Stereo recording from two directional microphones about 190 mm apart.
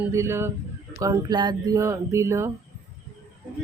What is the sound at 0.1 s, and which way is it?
Speech, 15° right (ahead or behind).